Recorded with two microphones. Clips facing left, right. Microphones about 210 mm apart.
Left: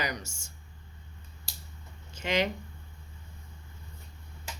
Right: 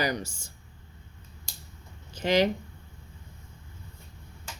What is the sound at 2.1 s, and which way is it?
Speech, 35° right (ahead or behind).